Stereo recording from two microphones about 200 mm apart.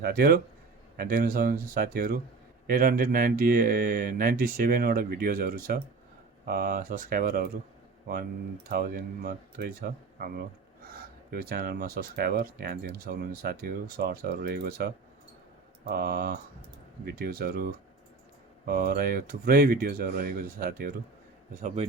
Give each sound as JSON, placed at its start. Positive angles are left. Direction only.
{"t": 0.0, "sound": "speech", "side_deg": -50}
{"t": 8.7, "sound": "speech", "side_deg": -45}
{"t": 15.9, "sound": "speech", "side_deg": -50}